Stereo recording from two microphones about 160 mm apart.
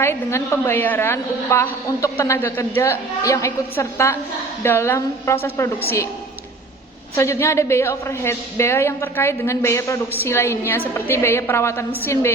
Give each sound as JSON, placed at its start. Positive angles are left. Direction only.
{"t": 0.0, "sound": "a woman's voice", "side_deg": 15}
{"t": 7.2, "sound": "a woman's voice", "side_deg": 15}